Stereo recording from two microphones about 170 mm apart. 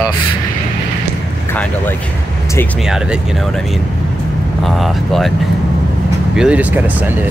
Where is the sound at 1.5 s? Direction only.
10° left (ahead or behind).